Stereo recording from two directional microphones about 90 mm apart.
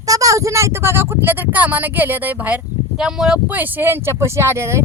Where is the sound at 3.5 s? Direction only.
20° right (ahead or behind).